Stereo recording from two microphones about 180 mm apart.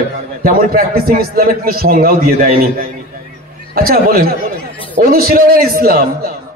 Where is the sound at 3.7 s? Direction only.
55° right (ahead or behind).